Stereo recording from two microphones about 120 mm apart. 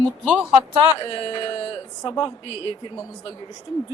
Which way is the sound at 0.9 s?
45° left (ahead or behind).